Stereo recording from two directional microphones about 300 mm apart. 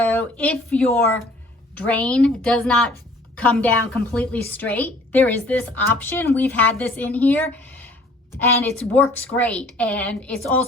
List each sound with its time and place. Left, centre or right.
0.0 s a woman's voice: centre